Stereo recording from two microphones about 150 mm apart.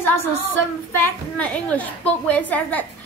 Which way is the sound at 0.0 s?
15° left (ahead or behind).